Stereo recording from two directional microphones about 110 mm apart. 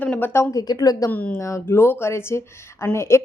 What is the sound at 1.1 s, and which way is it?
Speech, 15° left (ahead or behind).